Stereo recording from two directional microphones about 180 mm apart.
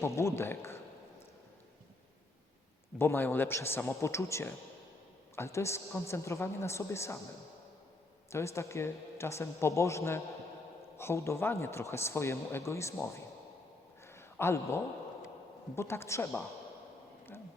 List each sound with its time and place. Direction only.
0.0 s a man's voice: 15° left (ahead or behind)
3.0 s a man's voice: 10° left (ahead or behind)
8.3 s a man's voice: 15° left (ahead or behind)
14.1 s a sound: 15° left (ahead or behind)
15.7 s a man's voice: 15° left (ahead or behind)